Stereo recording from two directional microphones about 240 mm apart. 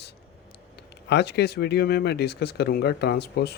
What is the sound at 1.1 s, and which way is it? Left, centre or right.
Speech, left.